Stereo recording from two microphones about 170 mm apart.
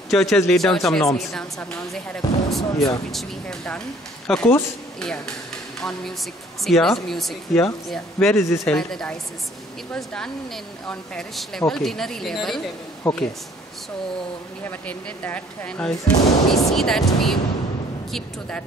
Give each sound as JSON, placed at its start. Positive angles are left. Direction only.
{"t": 0.1, "sound": "speech", "side_deg": 0}
{"t": 2.7, "sound": "speech", "side_deg": 20}
{"t": 3.1, "sound": "speech", "side_deg": 0}
{"t": 14.6, "sound": "speech", "side_deg": 10}